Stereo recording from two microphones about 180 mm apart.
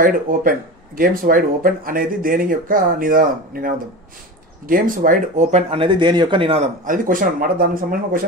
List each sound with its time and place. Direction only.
0.0 s speech: 50° right (ahead or behind); by 6.7 s 30° right (ahead or behind)
6.8 s speech: 45° right (ahead or behind)